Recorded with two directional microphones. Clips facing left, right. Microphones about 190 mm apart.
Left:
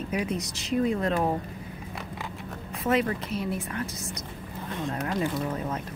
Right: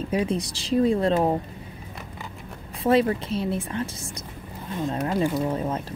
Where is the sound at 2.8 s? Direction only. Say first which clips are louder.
Right 5 dB; 30° right (ahead or behind).